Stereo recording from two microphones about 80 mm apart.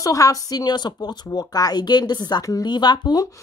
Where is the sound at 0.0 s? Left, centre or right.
Left.